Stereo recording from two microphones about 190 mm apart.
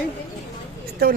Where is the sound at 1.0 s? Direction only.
50° right (ahead or behind).